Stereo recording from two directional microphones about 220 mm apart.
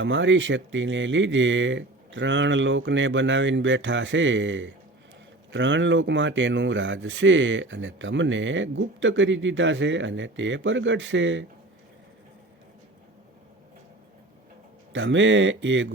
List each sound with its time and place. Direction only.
0.0 s speech: 55° right (ahead or behind)
14.9 s speech: 55° right (ahead or behind)